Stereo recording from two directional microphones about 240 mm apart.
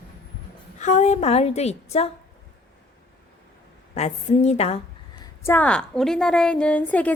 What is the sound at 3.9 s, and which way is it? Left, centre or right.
Speech, left.